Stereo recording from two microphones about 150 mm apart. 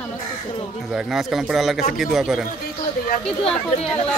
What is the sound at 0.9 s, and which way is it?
Speech, 5° right (ahead or behind).